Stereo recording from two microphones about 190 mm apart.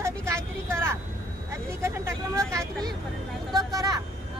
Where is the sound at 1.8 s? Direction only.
15° right (ahead or behind).